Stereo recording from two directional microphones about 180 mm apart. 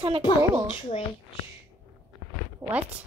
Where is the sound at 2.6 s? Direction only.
15° right (ahead or behind).